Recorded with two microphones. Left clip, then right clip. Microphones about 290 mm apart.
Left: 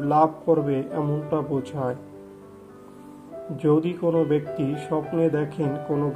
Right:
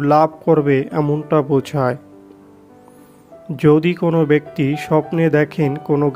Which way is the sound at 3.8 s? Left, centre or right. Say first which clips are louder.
Right 6 dB; right.